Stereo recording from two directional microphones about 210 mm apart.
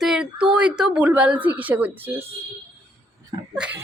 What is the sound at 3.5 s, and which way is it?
Speech, 5° right (ahead or behind).